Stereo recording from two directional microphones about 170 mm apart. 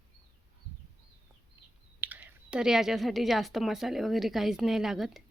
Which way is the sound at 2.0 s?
10° right (ahead or behind).